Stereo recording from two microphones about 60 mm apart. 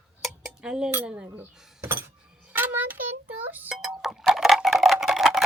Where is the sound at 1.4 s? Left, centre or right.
Right.